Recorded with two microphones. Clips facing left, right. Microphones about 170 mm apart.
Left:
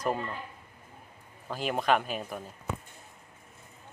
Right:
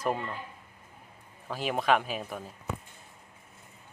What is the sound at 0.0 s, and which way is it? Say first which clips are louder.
Speech: even; 5° right (ahead or behind).